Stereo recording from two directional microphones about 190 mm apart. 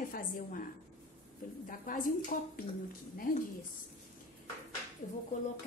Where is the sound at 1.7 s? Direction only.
45° left (ahead or behind).